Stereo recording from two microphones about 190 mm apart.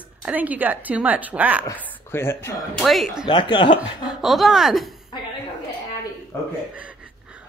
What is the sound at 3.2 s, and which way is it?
Speech, 25° left (ahead or behind).